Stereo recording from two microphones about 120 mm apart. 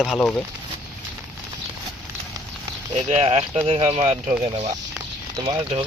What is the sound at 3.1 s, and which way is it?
Speech, 60° right (ahead or behind).